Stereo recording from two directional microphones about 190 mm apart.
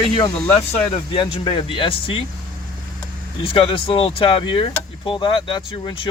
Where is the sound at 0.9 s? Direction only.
25° left (ahead or behind).